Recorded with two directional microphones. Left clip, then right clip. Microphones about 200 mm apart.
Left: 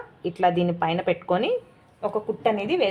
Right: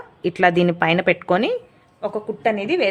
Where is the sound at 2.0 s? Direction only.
20° right (ahead or behind).